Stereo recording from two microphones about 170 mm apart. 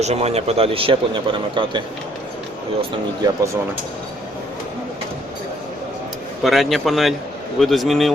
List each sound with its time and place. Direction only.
0.0 s a man's voice: 40° right (ahead or behind)
3.2 s speech: 25° right (ahead or behind)
6.4 s speech: centre (ahead or behind)